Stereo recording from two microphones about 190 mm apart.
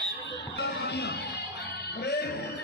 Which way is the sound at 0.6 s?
60° left (ahead or behind).